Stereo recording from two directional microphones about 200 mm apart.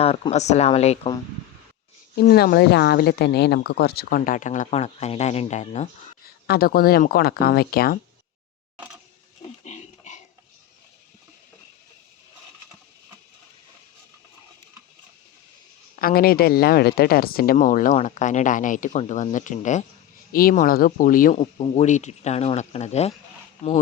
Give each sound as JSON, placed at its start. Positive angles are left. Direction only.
{"t": 0.0, "sound": "speech", "side_deg": 30}
{"t": 2.1, "sound": "speech", "side_deg": 50}
{"t": 6.2, "sound": "speech", "side_deg": 50}
{"t": 9.6, "sound": "a sound", "side_deg": 35}
{"t": 16.0, "sound": "speech", "side_deg": 45}